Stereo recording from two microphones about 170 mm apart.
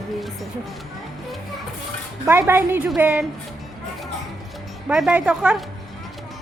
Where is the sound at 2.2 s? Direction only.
15° right (ahead or behind).